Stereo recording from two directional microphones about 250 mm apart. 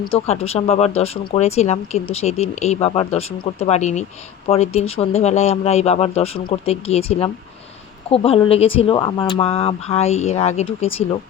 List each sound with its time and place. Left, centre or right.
0.0 s speech: left